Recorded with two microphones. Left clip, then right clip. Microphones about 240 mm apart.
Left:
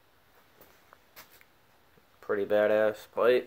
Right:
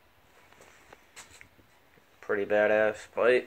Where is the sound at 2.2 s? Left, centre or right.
Centre.